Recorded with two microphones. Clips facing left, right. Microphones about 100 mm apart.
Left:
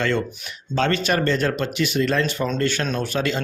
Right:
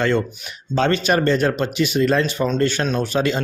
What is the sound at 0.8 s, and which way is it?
Speech, 20° right (ahead or behind).